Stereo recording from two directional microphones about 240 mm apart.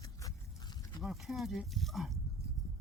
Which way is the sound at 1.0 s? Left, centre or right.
Centre.